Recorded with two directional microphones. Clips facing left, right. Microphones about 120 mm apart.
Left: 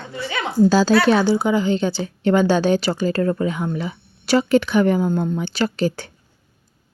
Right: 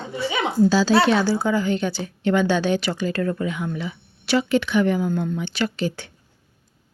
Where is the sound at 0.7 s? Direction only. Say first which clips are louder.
Left 3 dB; 50° left (ahead or behind).